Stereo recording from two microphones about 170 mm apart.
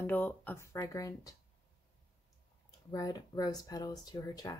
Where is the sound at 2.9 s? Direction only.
20° left (ahead or behind).